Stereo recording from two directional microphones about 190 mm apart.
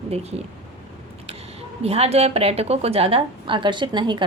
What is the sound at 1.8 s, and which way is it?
A woman's voice, 35° right (ahead or behind).